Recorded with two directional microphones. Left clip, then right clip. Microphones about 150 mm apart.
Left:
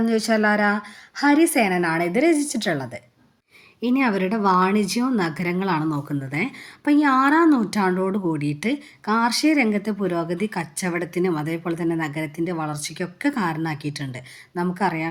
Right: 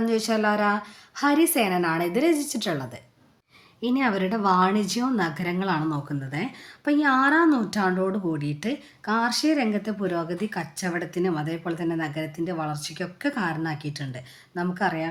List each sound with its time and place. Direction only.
0.0 s speech: 25° left (ahead or behind)